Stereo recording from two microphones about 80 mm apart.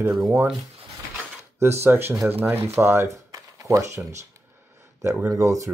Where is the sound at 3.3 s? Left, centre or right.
Right.